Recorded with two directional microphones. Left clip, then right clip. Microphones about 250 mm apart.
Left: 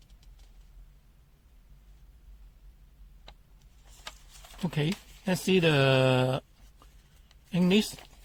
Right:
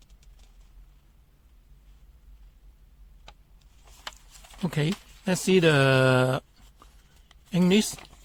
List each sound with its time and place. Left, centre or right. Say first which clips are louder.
4.6 s speech: right 3 dB; right